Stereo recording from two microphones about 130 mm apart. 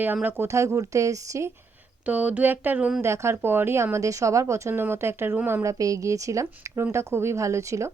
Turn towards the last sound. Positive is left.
turn(degrees=-25)  # may be behind; listen again after turning